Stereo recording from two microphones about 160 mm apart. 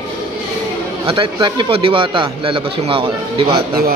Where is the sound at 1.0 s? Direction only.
30° right (ahead or behind).